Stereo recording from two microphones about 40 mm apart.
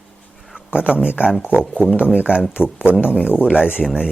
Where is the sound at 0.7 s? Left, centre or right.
Right.